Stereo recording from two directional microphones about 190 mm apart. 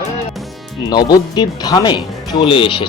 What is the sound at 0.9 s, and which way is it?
Speech, 20° left (ahead or behind).